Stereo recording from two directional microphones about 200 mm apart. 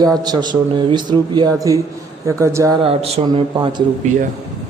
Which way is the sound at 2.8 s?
30° right (ahead or behind).